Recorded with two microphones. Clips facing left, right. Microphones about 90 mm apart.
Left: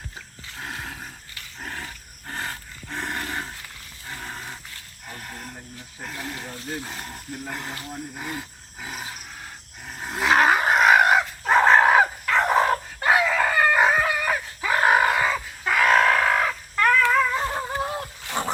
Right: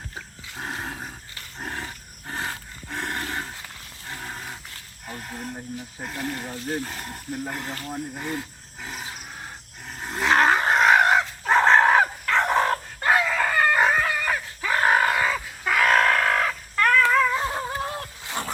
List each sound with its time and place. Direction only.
0.5 s dog: 25° right (ahead or behind)
2.9 s roar: centre (ahead or behind)
4.1 s a sound: 5° right (ahead or behind)
6.0 s speech: 5° right (ahead or behind)
6.2 s speech: 5° left (ahead or behind)
8.2 s roar: 5° left (ahead or behind)
10.0 s dog: 5° left (ahead or behind)
17.1 s a sound: 5° left (ahead or behind)
18.4 s a sound: 20° left (ahead or behind)